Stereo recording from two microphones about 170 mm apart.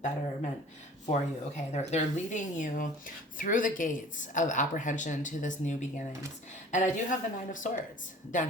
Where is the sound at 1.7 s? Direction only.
40° left (ahead or behind).